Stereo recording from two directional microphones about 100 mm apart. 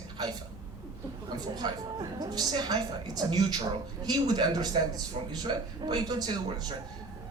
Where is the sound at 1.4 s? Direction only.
45° right (ahead or behind).